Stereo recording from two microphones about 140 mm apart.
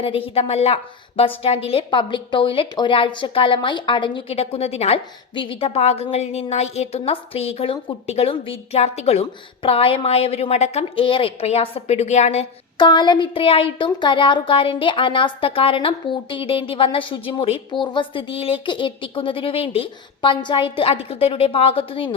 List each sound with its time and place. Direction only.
0.0 s a woman's voice: 40° left (ahead or behind)
12.7 s speech: 35° left (ahead or behind)